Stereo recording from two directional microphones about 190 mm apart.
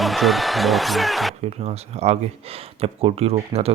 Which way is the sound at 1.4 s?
35° right (ahead or behind).